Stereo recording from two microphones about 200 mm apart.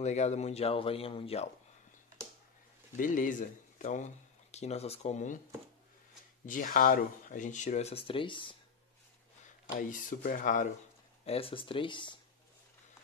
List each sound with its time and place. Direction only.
0.0 s speech: 35° left (ahead or behind)
3.0 s speech: 40° left (ahead or behind)
6.4 s speech: 40° left (ahead or behind); by 8.5 s 25° left (ahead or behind)
9.8 s speech: 45° left (ahead or behind)
11.2 s speech: 30° left (ahead or behind)